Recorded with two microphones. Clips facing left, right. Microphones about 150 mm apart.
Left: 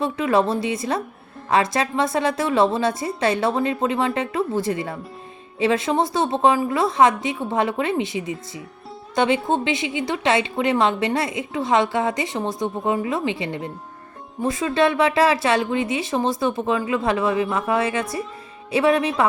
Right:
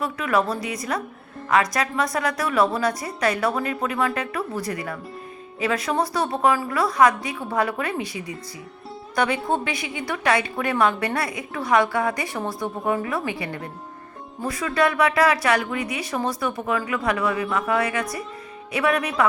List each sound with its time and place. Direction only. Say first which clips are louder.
0.0 s a woman's voice: left 3 dB; 25° left (ahead or behind)